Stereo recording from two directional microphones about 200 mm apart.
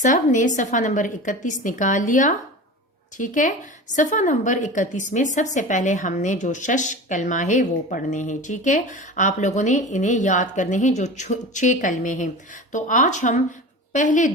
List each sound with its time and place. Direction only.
0.0 s a woman's voice: 40° left (ahead or behind)